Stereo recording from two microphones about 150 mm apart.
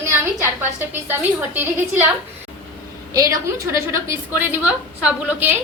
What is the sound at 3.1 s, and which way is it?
A woman's voice, 20° right (ahead or behind).